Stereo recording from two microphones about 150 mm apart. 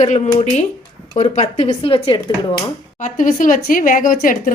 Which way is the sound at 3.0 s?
60° left (ahead or behind).